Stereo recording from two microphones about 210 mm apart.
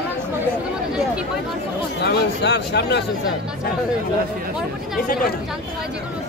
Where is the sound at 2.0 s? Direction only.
55° left (ahead or behind).